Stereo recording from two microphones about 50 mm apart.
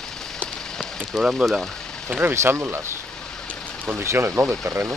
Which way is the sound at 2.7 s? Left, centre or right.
Right.